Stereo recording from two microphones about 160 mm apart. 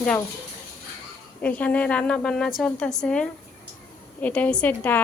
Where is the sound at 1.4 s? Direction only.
10° left (ahead or behind).